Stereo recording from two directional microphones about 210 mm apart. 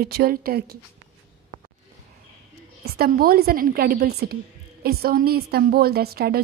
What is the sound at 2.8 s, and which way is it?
A woman's voice, 45° right (ahead or behind).